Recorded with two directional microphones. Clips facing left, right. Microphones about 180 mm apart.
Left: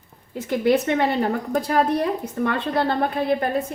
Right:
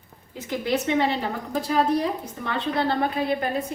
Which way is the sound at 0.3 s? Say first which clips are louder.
Left 6 dB; 55° left (ahead or behind).